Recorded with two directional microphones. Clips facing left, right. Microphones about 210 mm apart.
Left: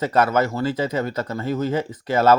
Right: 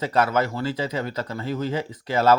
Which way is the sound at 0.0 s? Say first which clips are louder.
Left 3 dB; 50° left (ahead or behind).